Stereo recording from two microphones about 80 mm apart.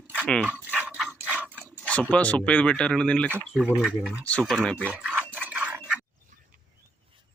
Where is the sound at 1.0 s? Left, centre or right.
Centre.